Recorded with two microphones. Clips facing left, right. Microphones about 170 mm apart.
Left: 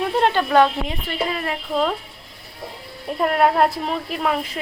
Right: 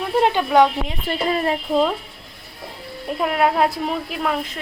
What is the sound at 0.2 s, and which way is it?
Speech, 10° right (ahead or behind).